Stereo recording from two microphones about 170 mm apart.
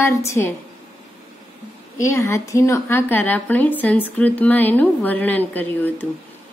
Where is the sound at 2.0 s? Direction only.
15° left (ahead or behind).